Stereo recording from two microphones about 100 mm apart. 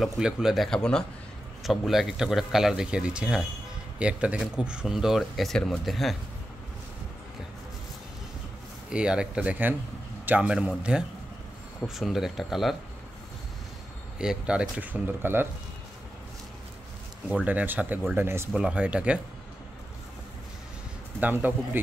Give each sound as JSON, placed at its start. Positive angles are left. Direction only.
{"t": 0.0, "sound": "speech", "side_deg": -5}
{"t": 0.7, "sound": "speech", "side_deg": 5}
{"t": 8.9, "sound": "a man's voice", "side_deg": -10}
{"t": 14.1, "sound": "speech", "side_deg": -5}
{"t": 17.5, "sound": "speech", "side_deg": -15}
{"t": 18.5, "sound": "speech", "side_deg": -10}
{"t": 21.2, "sound": "speech", "side_deg": -15}